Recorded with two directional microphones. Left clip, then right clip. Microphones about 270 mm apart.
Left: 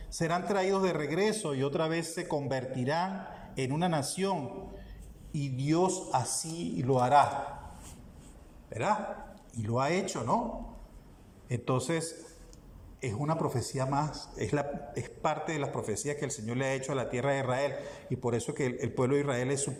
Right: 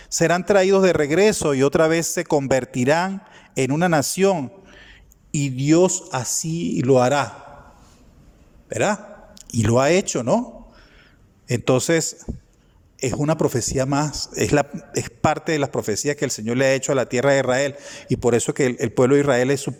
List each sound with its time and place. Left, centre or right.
0.1 s a man's voice: right
8.7 s a man's voice: right
11.4 s a man's voice: right